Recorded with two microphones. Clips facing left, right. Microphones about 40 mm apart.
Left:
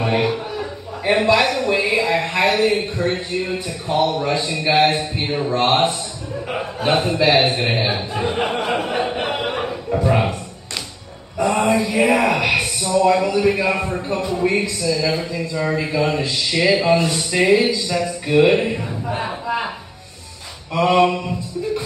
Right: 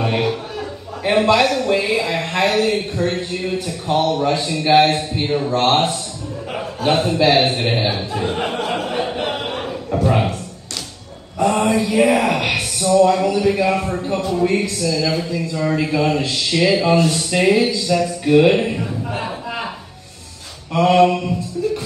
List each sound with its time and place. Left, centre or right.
1.3 s a sound: left
4.0 s a man's voice: left
7.7 s a man's voice: centre
11.3 s mantra: left
12.5 s a man's voice: left
20.7 s a man's voice: left